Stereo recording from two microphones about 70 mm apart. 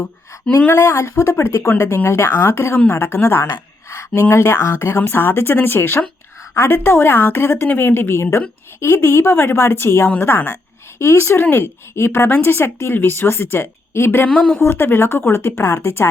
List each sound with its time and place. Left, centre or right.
0.7 s a woman's voice: left
2.7 s a woman's voice: left
10.1 s a woman's voice: left
10.9 s a woman's voice: left
14.3 s a woman's voice: centre
14.6 s a woman's voice: left